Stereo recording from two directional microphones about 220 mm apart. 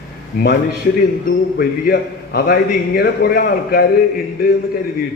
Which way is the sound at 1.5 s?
45° left (ahead or behind).